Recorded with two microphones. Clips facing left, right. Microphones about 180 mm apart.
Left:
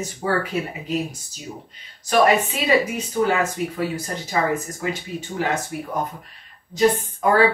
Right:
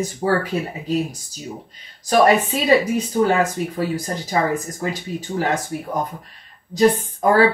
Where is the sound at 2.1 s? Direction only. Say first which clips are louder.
Right 2 dB; 35° right (ahead or behind).